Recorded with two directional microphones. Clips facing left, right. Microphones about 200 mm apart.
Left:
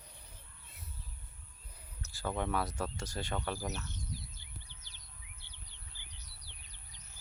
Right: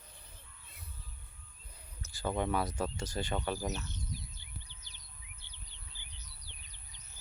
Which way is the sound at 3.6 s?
20° right (ahead or behind).